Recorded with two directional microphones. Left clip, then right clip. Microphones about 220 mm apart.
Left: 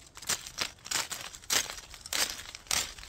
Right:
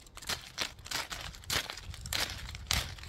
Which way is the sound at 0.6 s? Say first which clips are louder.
Left 3 dB; 10° left (ahead or behind).